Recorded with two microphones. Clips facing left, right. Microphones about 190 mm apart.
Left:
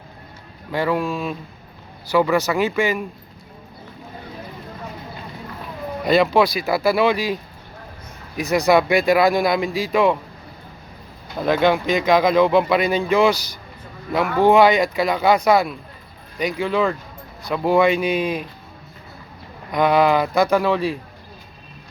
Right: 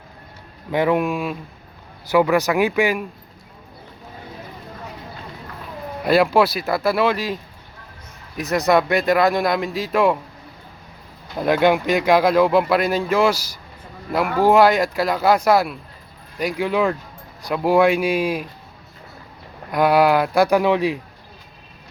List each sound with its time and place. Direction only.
0.7 s speech: 20° right (ahead or behind)
2.3 s speech: 15° right (ahead or behind)
6.1 s speech: 10° right (ahead or behind)
8.4 s speech: centre (ahead or behind)
11.3 s speech: 10° right (ahead or behind)
19.7 s speech: 5° right (ahead or behind)